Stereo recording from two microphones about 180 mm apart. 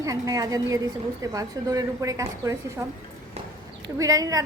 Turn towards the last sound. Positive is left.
turn(degrees=-20)  # may be behind; listen again after turning